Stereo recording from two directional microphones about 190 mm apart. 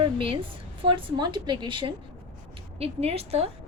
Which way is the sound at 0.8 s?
25° right (ahead or behind).